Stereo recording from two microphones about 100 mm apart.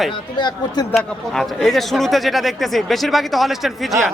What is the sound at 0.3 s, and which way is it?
Speech, 45° left (ahead or behind).